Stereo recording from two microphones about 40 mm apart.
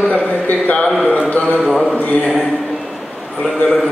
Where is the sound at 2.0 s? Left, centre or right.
Left.